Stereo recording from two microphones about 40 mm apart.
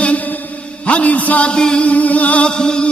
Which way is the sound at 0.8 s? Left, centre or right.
Left.